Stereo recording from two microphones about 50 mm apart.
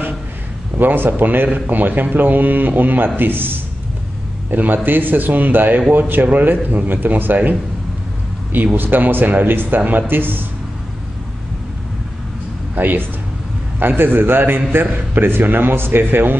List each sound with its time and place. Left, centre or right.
0.7 s a man's voice: right
8.7 s speech: right
12.7 s a man's voice: right